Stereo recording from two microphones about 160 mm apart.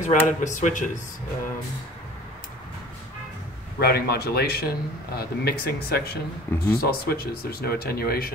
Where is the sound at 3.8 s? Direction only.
80° left.